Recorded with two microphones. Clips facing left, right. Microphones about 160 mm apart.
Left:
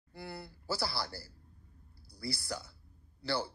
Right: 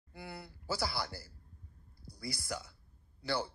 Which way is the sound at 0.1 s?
35° left (ahead or behind).